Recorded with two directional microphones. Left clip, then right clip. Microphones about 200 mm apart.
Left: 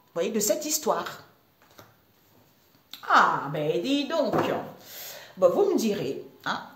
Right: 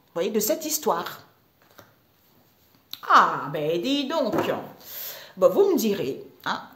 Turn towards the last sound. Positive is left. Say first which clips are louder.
# right 2 dB
turn(degrees=-40)  # may be behind; listen again after turning